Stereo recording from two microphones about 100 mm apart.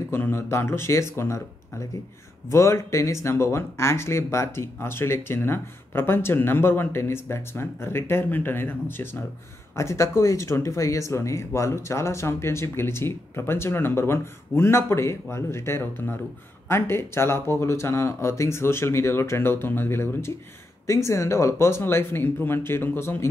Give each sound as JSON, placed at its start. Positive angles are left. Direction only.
{"t": 0.1, "sound": "speech", "side_deg": 25}